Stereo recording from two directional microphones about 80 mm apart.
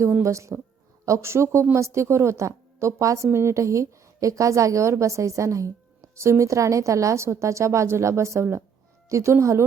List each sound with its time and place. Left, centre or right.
0.0 s a woman's voice: right